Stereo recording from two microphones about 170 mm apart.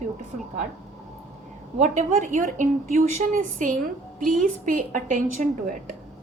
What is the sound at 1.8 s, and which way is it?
A woman's voice, 45° right (ahead or behind).